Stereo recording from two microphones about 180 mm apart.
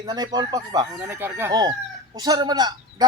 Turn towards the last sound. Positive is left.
turn(degrees=-20)  # may be behind; listen again after turning